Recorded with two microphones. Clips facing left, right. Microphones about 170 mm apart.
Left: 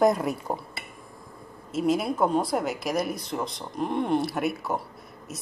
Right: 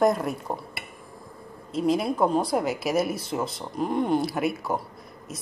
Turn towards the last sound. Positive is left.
turn(degrees=0)  # may be behind; listen again after turning